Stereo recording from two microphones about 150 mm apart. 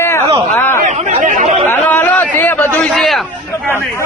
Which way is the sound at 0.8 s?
55° right (ahead or behind).